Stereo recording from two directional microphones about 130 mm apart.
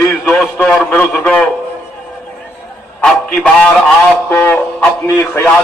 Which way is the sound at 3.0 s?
5° left (ahead or behind).